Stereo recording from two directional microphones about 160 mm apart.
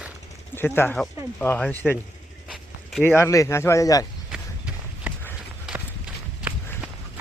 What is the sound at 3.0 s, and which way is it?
Speech, 15° left (ahead or behind).